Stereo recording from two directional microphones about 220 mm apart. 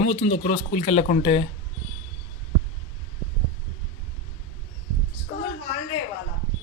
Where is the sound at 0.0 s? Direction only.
30° left (ahead or behind).